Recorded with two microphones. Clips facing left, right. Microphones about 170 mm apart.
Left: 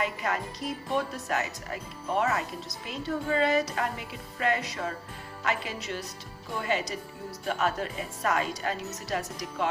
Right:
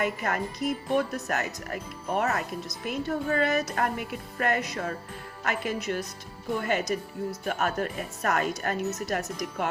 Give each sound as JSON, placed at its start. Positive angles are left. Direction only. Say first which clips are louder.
{"t": 0.0, "sound": "a woman's voice", "louder": "right 2 dB", "side_deg": -55}